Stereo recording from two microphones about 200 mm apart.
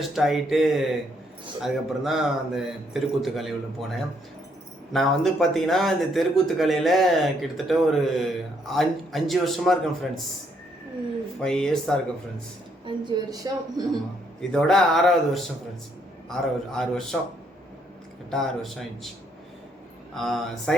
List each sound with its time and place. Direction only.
0.0 s speech: centre (ahead or behind)
11.3 s speech: 5° left (ahead or behind)
12.8 s speech: 20° right (ahead or behind)
14.5 s speech: centre (ahead or behind)
18.3 s speech: centre (ahead or behind)
20.1 s speech: centre (ahead or behind)